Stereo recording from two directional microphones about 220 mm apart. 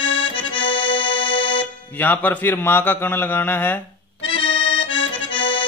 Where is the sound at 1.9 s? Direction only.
5° left (ahead or behind).